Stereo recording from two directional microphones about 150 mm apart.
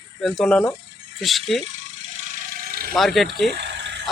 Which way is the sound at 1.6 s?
50° right (ahead or behind).